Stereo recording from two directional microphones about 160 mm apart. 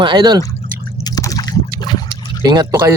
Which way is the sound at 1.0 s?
20° left (ahead or behind).